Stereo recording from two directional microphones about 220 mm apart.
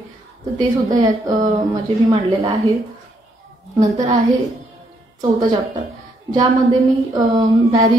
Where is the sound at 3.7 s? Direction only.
15° right (ahead or behind).